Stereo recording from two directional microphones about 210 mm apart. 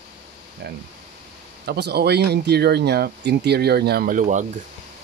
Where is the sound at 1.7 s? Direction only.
50° right (ahead or behind).